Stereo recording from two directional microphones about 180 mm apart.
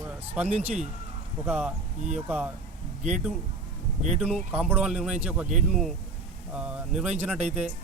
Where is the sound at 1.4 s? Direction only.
10° right (ahead or behind).